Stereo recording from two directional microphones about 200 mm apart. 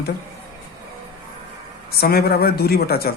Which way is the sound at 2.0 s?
50° left (ahead or behind).